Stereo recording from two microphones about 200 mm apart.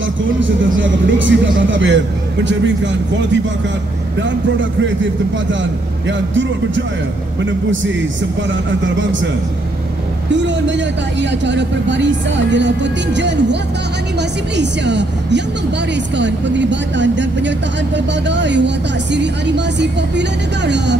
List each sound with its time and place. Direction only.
0.7 s speech: 70° right (ahead or behind)
5.5 s speech: 65° right (ahead or behind)
8.5 s speech: 65° right (ahead or behind)
10.3 s speech: 65° right (ahead or behind)
14.6 s speech: 60° right (ahead or behind)